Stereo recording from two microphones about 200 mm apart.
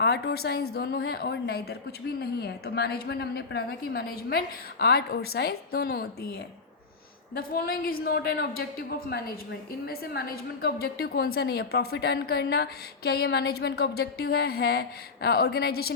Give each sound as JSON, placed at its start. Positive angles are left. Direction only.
{"t": 0.0, "sound": "a woman's voice", "side_deg": 55}